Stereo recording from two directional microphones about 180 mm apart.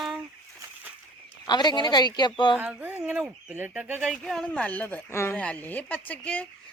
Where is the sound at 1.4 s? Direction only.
25° left (ahead or behind).